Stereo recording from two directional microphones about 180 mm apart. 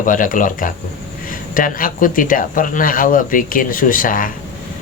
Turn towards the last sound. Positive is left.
turn(degrees=50)  # may be behind; listen again after turning